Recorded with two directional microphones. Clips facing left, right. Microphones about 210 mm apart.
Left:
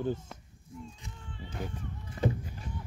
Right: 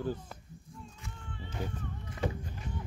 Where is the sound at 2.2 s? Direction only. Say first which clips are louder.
Left 4 dB; 35° left (ahead or behind).